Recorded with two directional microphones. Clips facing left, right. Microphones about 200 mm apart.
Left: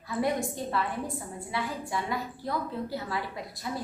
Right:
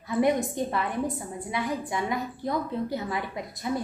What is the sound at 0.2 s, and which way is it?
A woman's voice, 20° right (ahead or behind).